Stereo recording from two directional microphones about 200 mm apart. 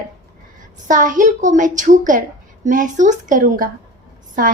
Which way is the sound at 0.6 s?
40° right (ahead or behind).